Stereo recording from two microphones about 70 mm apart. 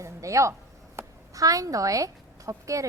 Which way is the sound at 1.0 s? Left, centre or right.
Right.